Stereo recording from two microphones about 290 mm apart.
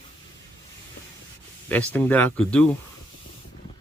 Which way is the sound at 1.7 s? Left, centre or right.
Centre.